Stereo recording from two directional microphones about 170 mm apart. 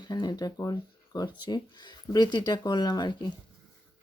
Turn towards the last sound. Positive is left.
turn(degrees=25)  # may be behind; listen again after turning